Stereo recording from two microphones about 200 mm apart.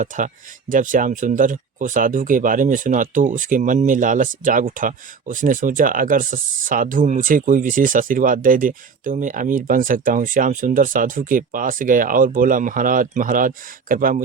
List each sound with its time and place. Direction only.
0.1 s speech: 40° right (ahead or behind)